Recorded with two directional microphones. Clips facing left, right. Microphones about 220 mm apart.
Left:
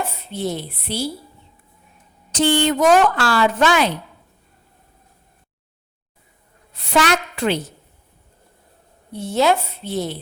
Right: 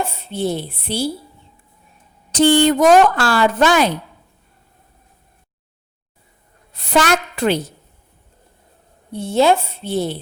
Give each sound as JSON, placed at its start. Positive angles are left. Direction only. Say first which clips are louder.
{"t": 0.0, "sound": "speech", "louder": "right 3 dB", "side_deg": -30}
{"t": 2.3, "sound": "a woman's voice", "louder": "right 5 dB", "side_deg": -40}
{"t": 6.7, "sound": "a woman's voice", "louder": "right 2 dB", "side_deg": -45}
{"t": 9.1, "sound": "speech", "louder": "right 3 dB", "side_deg": -30}